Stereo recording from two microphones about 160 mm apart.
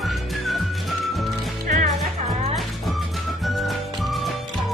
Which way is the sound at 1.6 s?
50° right (ahead or behind).